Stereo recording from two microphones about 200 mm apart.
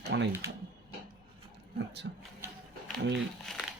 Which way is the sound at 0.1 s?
60° right (ahead or behind).